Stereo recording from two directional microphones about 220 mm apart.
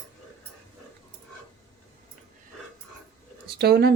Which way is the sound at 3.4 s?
45° right (ahead or behind).